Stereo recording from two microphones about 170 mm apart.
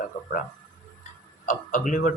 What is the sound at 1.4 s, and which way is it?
Speech, 50° left (ahead or behind).